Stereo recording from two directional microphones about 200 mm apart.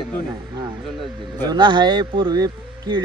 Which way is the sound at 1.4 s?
20° right (ahead or behind).